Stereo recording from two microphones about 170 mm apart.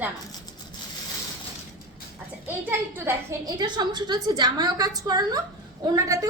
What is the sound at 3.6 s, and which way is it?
A woman's voice, 25° right (ahead or behind).